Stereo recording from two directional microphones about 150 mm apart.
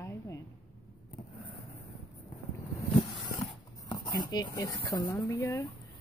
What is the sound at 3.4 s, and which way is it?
A woman's voice, 30° left (ahead or behind).